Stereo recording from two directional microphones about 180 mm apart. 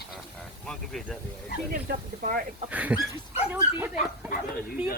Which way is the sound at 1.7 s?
55° right (ahead or behind).